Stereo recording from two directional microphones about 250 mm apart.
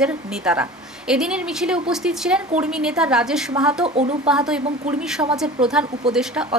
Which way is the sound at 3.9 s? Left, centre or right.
Right.